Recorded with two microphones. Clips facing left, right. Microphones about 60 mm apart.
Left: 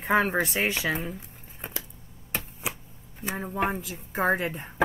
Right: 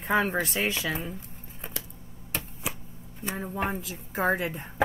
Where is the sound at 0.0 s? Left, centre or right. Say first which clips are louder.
Left 2 dB; left.